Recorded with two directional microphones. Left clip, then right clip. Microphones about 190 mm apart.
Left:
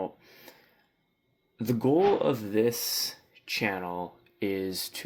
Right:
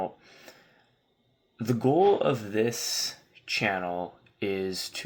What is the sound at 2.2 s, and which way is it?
Speech, 35° left (ahead or behind).